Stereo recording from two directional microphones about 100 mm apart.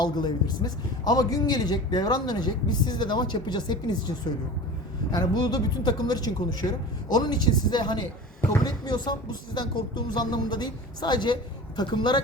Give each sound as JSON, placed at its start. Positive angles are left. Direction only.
{"t": 0.0, "sound": "a man's voice", "side_deg": 45}
{"t": 5.1, "sound": "a man's voice", "side_deg": 45}